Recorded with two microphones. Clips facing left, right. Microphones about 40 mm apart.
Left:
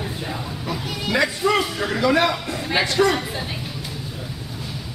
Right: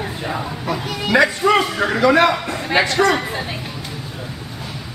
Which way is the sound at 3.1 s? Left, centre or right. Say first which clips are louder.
Right 4 dB; centre.